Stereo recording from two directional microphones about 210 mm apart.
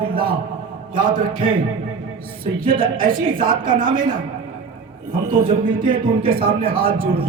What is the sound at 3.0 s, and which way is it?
Speech, 40° right (ahead or behind).